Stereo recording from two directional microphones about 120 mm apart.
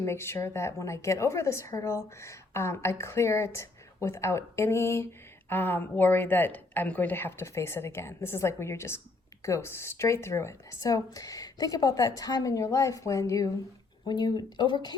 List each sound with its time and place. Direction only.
0.0 s a woman's voice: 20° left (ahead or behind); by 14.9 s 35° left (ahead or behind)